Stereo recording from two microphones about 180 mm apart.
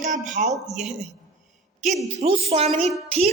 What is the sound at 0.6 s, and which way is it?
Speech, 40° right (ahead or behind).